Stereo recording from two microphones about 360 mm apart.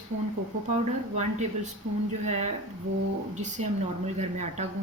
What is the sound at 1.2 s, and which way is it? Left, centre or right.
Speech, centre.